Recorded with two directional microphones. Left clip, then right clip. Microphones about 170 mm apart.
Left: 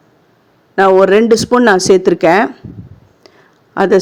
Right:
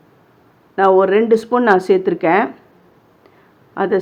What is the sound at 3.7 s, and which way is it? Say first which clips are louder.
Speech: left 7 dB; 45° left (ahead or behind).